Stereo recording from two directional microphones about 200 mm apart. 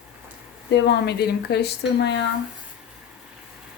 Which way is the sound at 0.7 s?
55° left (ahead or behind).